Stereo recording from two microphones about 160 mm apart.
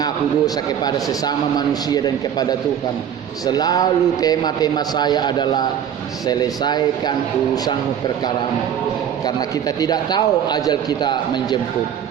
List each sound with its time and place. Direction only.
0.0 s a man's voice: 25° left (ahead or behind)
9.2 s a man's voice: 25° left (ahead or behind)